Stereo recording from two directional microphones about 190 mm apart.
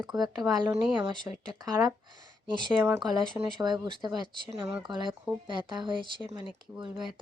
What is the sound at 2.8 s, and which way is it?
Speech, 15° right (ahead or behind).